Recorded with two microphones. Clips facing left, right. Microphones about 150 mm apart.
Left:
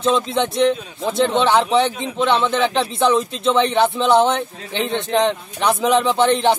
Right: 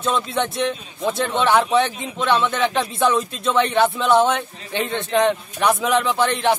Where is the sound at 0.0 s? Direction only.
20° left (ahead or behind).